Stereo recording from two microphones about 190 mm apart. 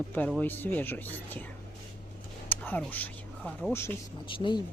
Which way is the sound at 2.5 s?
10° left (ahead or behind).